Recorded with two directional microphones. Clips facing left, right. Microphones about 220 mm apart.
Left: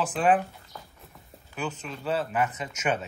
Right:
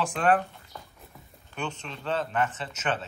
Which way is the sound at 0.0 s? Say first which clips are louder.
Left 1 dB; 5° left (ahead or behind).